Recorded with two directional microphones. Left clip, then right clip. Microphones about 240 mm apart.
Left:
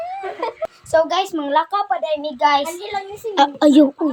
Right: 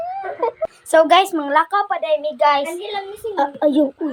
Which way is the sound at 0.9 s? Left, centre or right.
Right.